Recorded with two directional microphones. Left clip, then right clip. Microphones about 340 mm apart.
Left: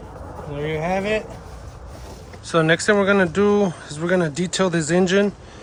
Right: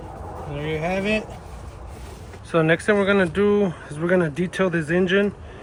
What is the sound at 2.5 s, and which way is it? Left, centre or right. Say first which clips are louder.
Speech: left 2 dB; centre.